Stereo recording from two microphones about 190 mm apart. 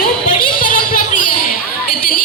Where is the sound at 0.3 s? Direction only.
45° left (ahead or behind).